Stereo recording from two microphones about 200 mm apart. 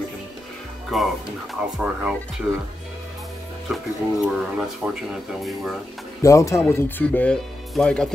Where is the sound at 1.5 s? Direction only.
5° right (ahead or behind).